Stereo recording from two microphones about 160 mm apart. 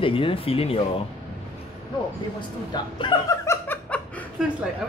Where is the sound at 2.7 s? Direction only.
25° left (ahead or behind).